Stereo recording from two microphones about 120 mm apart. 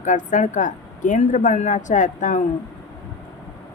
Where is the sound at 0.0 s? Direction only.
90° left.